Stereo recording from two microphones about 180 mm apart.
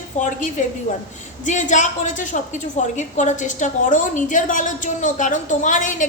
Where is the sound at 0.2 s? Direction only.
45° left (ahead or behind).